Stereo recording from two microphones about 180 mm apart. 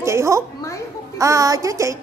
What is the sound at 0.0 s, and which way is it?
A woman's voice, 15° right (ahead or behind).